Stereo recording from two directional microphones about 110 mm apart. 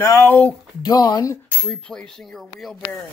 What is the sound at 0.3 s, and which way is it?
Speech, 15° left (ahead or behind).